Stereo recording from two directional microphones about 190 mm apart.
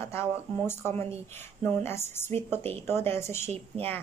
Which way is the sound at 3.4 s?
35° right (ahead or behind).